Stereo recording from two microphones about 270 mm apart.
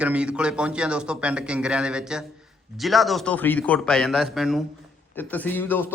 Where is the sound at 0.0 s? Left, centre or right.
Centre.